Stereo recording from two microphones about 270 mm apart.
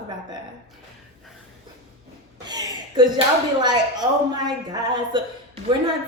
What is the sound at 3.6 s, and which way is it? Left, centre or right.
A woman's voice, centre.